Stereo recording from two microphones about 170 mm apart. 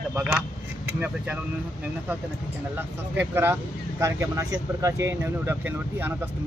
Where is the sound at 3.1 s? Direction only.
10° right (ahead or behind).